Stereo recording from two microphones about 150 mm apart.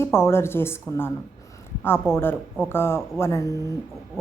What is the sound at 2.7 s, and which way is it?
Speech, 15° left (ahead or behind).